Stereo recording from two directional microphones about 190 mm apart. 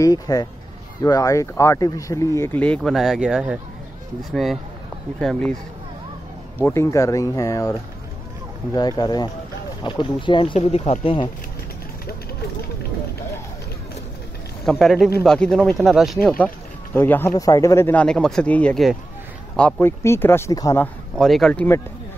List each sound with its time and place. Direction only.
0.0 s speech: 20° left (ahead or behind); by 5.6 s 5° left (ahead or behind)
6.6 s speech: 15° left (ahead or behind)
8.7 s speech: 20° left (ahead or behind)
14.6 s speech: centre (ahead or behind)